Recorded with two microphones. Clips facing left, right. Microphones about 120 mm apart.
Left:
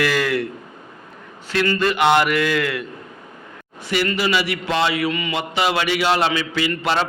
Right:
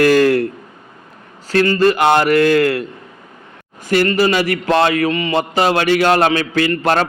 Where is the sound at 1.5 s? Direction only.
35° right (ahead or behind).